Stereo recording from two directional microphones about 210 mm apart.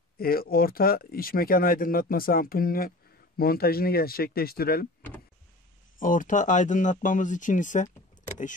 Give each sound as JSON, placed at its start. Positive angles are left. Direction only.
{"t": 0.2, "sound": "speech", "side_deg": 45}
{"t": 5.9, "sound": "speech", "side_deg": 40}